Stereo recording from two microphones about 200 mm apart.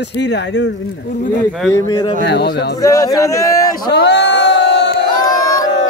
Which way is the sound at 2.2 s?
55° left (ahead or behind).